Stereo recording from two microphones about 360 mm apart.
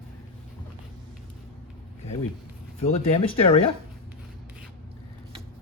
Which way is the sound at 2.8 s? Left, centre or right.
Centre.